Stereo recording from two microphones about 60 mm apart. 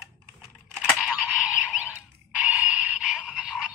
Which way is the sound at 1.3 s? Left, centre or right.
Right.